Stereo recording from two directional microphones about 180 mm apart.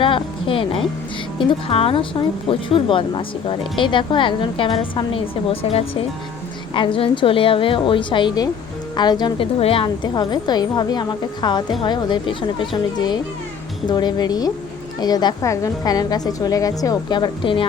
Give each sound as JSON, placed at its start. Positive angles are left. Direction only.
{"t": 0.0, "sound": "speech", "side_deg": 30}